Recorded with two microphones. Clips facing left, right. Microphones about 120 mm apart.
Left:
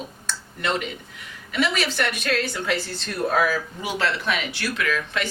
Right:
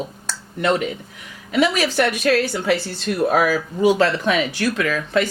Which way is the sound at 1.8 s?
40° right (ahead or behind).